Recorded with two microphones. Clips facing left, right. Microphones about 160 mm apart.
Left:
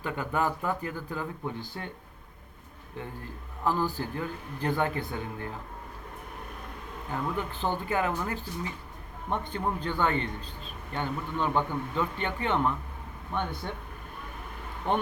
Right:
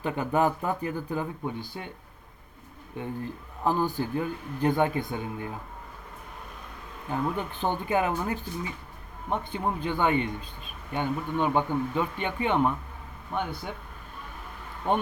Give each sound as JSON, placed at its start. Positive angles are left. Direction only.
{"t": 0.0, "sound": "speech", "side_deg": -20}
{"t": 3.6, "sound": "speech", "side_deg": -20}
{"t": 7.3, "sound": "speech", "side_deg": -20}